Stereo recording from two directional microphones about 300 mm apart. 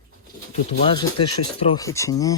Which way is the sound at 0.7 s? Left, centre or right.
Centre.